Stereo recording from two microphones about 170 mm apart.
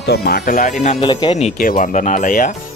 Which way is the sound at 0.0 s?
75° left (ahead or behind).